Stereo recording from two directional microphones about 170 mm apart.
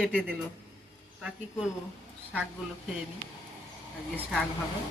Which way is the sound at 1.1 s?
5° right (ahead or behind).